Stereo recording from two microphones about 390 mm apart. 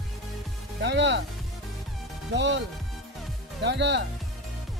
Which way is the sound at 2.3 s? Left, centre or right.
Right.